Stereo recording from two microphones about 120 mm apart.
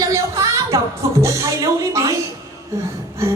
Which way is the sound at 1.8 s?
25° right (ahead or behind).